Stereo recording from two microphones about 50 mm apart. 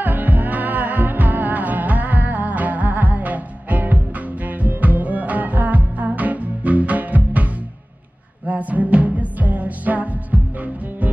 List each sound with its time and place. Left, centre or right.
0.0 s music: right